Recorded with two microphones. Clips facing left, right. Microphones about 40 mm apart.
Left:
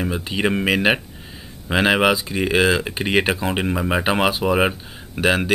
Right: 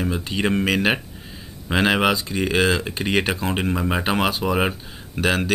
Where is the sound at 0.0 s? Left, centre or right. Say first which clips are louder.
Left 1 dB; centre.